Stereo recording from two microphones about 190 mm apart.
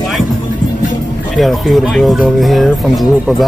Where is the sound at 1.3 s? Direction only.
Centre (ahead or behind).